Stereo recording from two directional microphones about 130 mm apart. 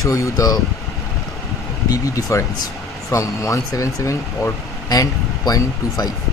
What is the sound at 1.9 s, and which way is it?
Speech, 25° left (ahead or behind).